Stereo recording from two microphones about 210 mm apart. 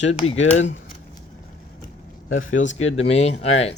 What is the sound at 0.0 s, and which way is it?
Speech, 30° left (ahead or behind).